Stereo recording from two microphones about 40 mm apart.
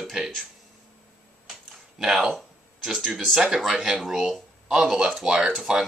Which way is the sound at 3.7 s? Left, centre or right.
Centre.